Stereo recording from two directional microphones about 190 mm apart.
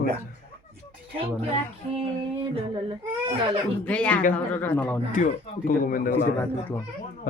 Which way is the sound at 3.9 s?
5° left (ahead or behind).